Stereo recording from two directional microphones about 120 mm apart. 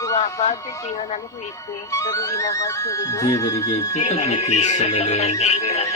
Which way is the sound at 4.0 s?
65° left (ahead or behind).